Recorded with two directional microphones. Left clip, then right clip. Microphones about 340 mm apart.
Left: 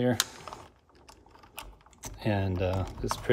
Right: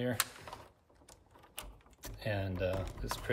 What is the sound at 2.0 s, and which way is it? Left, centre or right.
Speech, centre.